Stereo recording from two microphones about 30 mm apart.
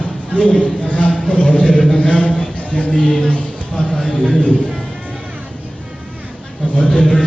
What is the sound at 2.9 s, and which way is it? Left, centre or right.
Speech, left.